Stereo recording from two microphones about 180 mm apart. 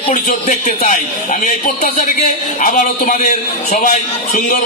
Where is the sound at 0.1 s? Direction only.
45° left (ahead or behind).